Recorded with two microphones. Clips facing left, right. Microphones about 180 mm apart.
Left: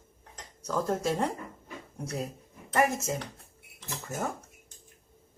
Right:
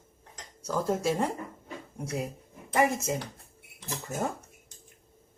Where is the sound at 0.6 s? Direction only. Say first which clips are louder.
Right 1 dB; 5° right (ahead or behind).